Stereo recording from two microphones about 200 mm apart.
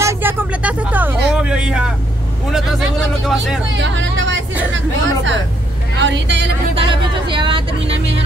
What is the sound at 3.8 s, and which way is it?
Speech, 65° right (ahead or behind).